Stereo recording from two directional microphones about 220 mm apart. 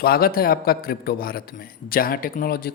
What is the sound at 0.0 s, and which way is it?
A man's voice, 45° left (ahead or behind).